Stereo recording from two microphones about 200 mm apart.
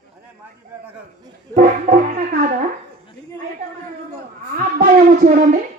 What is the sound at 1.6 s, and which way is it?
Music, 45° right (ahead or behind).